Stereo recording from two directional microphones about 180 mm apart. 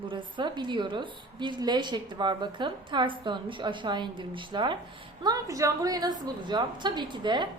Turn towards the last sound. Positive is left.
turn(degrees=-25)  # may be behind; listen again after turning